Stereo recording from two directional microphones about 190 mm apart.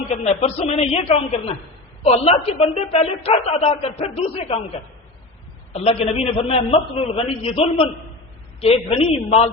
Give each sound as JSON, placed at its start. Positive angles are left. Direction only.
{"t": 0.1, "sound": "a woman's voice", "side_deg": 35}
{"t": 5.7, "sound": "a woman's voice", "side_deg": 35}